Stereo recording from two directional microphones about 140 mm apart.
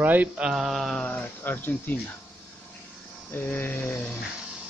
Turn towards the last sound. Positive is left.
turn(degrees=10)  # may be behind; listen again after turning